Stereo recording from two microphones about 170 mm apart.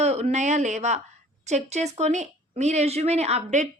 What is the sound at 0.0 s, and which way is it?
A woman's voice, 40° right (ahead or behind).